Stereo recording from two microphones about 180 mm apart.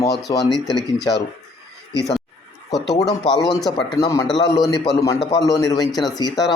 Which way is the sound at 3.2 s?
20° left (ahead or behind).